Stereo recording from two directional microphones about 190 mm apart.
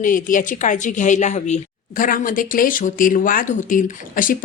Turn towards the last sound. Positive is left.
turn(degrees=45)  # may be behind; listen again after turning